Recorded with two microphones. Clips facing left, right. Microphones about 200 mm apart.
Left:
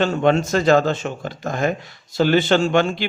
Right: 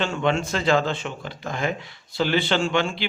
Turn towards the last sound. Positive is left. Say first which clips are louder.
# left 6 dB
turn(degrees=45)  # may be behind; listen again after turning